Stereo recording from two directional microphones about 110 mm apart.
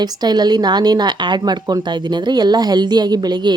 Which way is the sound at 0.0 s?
40° right (ahead or behind).